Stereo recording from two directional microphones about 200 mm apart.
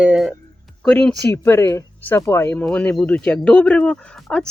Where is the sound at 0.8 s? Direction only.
5° left (ahead or behind).